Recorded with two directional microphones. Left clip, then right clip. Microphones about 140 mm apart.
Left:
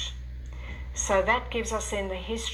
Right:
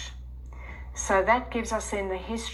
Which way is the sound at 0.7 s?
40° left (ahead or behind).